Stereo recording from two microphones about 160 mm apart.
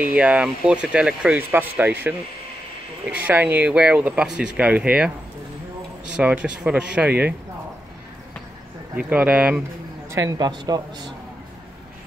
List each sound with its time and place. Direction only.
0.0 s speech: 10° right (ahead or behind)
3.2 s speech: 10° right (ahead or behind)
6.1 s speech: 5° right (ahead or behind)
8.9 s speech: 10° right (ahead or behind)
10.1 s a man's voice: 20° right (ahead or behind)